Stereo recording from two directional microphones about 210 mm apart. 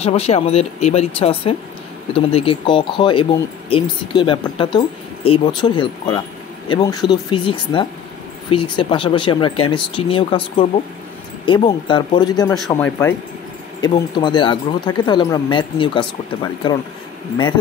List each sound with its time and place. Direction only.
0.0 s speech: 30° left (ahead or behind)
12.6 s speech: 5° left (ahead or behind)
13.7 s speech: 20° left (ahead or behind)